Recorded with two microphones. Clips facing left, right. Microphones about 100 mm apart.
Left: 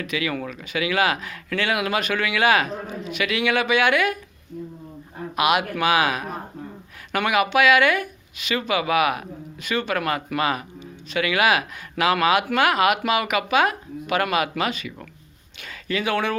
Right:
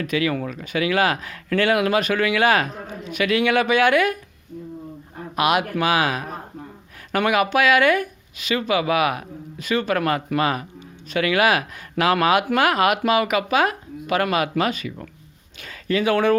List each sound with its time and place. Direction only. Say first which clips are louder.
0.0 s speech: right 4 dB; 35° right (ahead or behind)
5.4 s speech: right 1 dB; 35° right (ahead or behind)